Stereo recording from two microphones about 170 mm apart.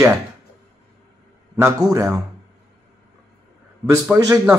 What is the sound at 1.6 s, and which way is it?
Speech, 20° right (ahead or behind).